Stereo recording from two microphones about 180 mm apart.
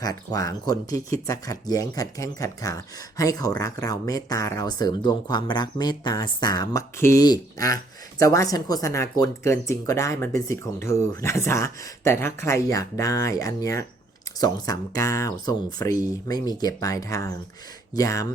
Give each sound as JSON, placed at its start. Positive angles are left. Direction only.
{"t": 0.0, "sound": "speech", "side_deg": 20}